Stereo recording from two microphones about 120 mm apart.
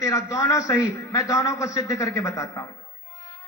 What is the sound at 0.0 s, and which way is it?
A woman's voice, 25° left (ahead or behind).